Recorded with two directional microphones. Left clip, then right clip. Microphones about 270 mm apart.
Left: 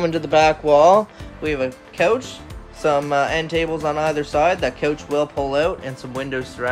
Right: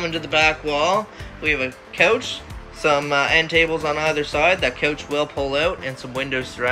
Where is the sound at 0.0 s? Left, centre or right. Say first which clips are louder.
Left 3 dB; centre.